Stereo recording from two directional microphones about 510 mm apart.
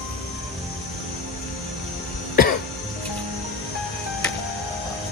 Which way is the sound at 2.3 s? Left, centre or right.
Centre.